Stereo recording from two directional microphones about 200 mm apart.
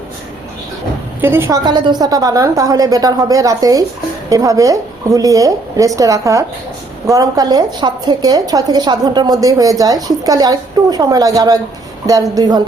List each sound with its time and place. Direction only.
1.2 s a woman's voice: 10° right (ahead or behind)